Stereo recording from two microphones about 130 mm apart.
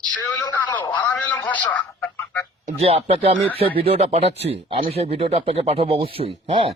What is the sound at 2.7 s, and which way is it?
Speech, 50° right (ahead or behind).